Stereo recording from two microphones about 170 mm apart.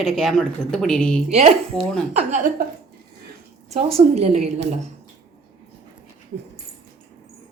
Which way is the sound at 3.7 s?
40° right (ahead or behind).